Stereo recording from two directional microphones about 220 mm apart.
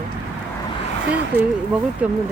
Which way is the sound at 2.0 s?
5° right (ahead or behind).